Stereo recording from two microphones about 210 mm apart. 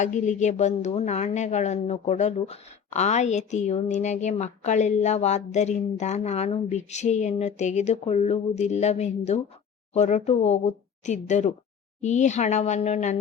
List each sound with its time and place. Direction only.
0.0 s speech: 35° left (ahead or behind)